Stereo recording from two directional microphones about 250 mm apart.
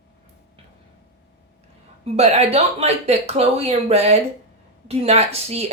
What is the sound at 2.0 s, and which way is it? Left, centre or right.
A woman's voice, right.